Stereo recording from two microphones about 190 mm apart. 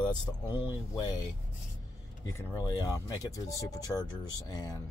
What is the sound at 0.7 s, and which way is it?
Speech, 20° left (ahead or behind).